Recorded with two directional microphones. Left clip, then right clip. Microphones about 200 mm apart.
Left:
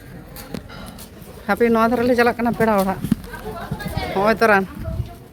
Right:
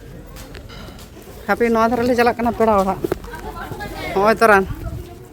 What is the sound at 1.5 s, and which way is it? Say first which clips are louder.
Speech: right 1 dB; centre (ahead or behind).